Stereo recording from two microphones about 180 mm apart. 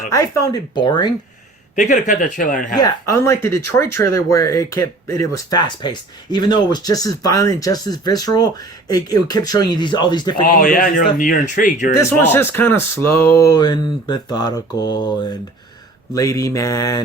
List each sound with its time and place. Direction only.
0.1 s speech: 20° left (ahead or behind)
1.7 s speech: 45° left (ahead or behind)
2.8 s speech: 15° left (ahead or behind)
10.4 s speech: 50° left (ahead or behind)
11.9 s speech: 15° left (ahead or behind)